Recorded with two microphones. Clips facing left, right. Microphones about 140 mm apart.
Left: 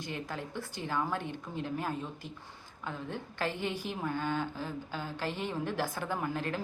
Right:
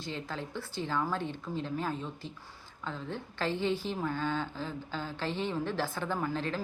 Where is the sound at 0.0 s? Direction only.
15° left (ahead or behind).